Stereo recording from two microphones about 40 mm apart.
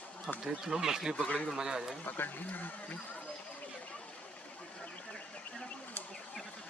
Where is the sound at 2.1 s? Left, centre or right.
Left.